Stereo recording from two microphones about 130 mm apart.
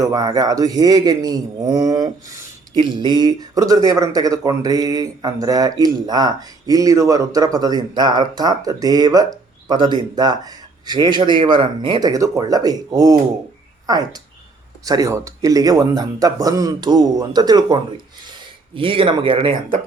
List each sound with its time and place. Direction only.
0.0 s a man's voice: 30° right (ahead or behind)